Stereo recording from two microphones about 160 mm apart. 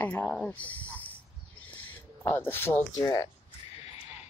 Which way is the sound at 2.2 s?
15° left (ahead or behind).